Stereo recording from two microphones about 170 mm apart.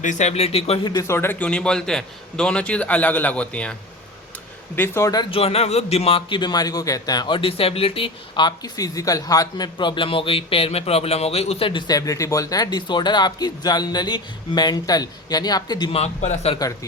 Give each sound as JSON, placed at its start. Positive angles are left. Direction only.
{"t": 0.0, "sound": "speech", "side_deg": 45}
{"t": 0.9, "sound": "a man's voice", "side_deg": 15}
{"t": 5.3, "sound": "speech", "side_deg": 35}
{"t": 16.0, "sound": "speech", "side_deg": 40}